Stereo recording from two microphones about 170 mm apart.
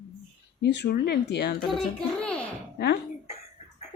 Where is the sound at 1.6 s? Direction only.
5° left (ahead or behind).